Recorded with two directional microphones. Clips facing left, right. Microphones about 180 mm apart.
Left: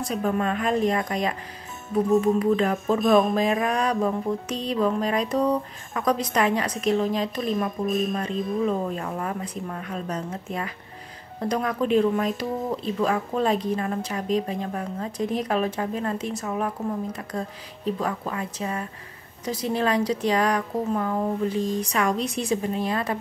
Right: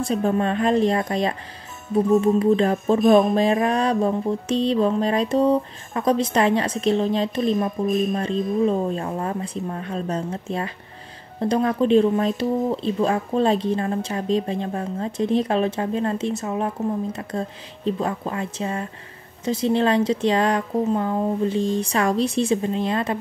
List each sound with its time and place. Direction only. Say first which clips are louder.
0.0 s music: right 4 dB; 30° right (ahead or behind)